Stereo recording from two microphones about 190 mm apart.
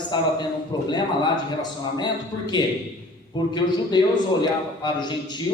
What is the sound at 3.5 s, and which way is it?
A man's voice, 20° left (ahead or behind).